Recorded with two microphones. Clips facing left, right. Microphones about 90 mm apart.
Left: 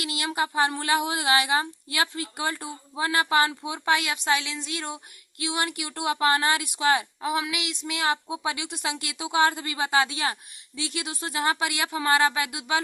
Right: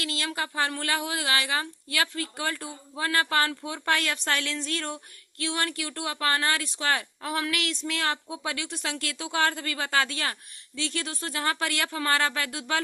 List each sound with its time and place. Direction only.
0.0 s speech: 20° left (ahead or behind)